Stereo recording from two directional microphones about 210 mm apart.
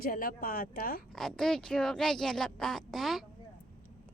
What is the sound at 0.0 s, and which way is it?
A woman's voice, 45° left (ahead or behind).